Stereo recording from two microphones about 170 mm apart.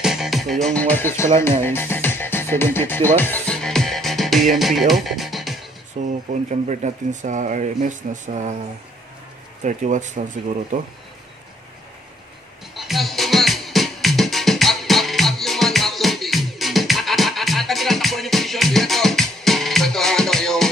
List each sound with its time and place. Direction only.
0.0 s music: centre (ahead or behind); by 1.3 s 15° left (ahead or behind)
1.4 s speech: 15° left (ahead or behind)
3.2 s music: 10° left (ahead or behind)
6.0 s speech: 45° right (ahead or behind)
9.6 s speech: 45° right (ahead or behind)
12.7 s music: centre (ahead or behind)